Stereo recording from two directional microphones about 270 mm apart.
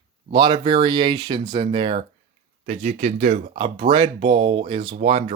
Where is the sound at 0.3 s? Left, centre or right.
Centre.